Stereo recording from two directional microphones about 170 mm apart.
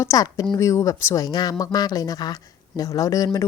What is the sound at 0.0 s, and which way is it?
Speech, 20° left (ahead or behind).